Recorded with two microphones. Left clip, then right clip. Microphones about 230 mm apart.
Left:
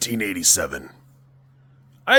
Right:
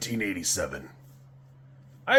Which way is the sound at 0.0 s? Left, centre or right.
Left.